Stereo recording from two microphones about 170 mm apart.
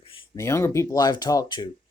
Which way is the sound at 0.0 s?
30° left (ahead or behind).